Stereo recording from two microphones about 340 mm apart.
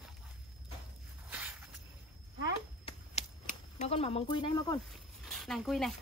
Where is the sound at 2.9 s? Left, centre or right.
Centre.